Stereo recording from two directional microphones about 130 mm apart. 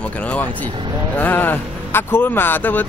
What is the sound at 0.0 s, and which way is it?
Speech, 10° left (ahead or behind).